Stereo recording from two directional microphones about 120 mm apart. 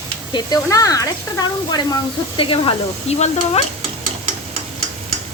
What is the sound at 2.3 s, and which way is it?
Speech, 45° left (ahead or behind).